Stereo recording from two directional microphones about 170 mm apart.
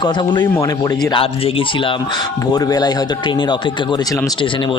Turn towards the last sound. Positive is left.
turn(degrees=30)  # may be behind; listen again after turning